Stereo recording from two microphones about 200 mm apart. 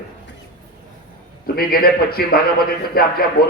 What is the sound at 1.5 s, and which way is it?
A man's voice, 50° left (ahead or behind).